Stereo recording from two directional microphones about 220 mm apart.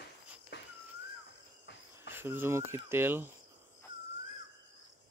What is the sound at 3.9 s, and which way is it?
Crow, 55° left (ahead or behind).